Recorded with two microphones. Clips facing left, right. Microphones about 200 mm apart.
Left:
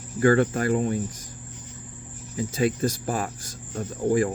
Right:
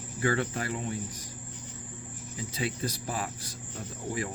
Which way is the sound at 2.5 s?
45° left (ahead or behind).